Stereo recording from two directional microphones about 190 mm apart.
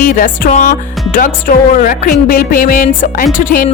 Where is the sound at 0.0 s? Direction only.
45° left (ahead or behind).